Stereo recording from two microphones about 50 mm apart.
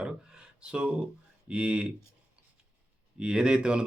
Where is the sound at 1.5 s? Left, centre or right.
Centre.